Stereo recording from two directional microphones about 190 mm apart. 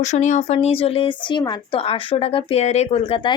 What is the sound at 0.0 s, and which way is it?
Speech, 40° left (ahead or behind).